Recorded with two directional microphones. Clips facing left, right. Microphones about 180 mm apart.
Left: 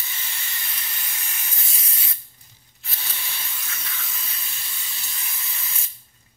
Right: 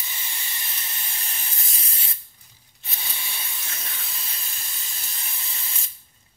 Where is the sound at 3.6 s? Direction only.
30° right (ahead or behind).